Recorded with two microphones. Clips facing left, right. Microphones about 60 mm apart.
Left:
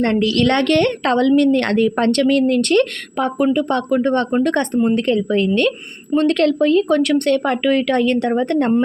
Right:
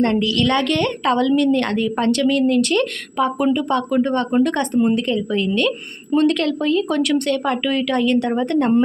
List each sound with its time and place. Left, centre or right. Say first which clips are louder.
0.0 s speech: left 2 dB; left